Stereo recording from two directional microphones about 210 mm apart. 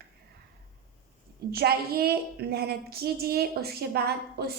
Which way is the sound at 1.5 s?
50° right (ahead or behind).